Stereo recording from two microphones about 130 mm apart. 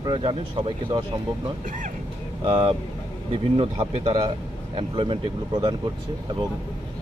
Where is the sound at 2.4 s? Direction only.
40° right (ahead or behind).